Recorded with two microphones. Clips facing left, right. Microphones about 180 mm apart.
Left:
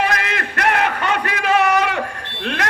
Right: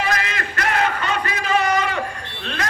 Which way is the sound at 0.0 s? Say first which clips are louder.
Left 3 dB; 60° left (ahead or behind).